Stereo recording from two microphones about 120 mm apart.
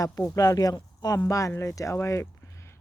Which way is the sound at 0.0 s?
25° left (ahead or behind).